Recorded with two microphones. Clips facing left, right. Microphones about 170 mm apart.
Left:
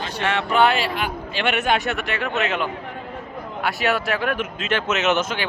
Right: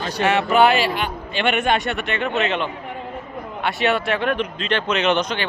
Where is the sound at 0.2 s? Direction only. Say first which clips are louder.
Right 3 dB; 10° right (ahead or behind).